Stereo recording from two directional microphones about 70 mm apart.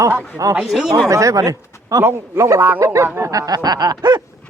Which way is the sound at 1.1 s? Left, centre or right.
Right.